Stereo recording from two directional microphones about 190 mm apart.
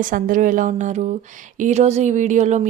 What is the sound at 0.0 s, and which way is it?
Speech, 45° right (ahead or behind).